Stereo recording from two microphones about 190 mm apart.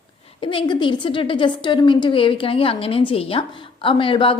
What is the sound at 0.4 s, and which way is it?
A woman's voice, 25° left (ahead or behind).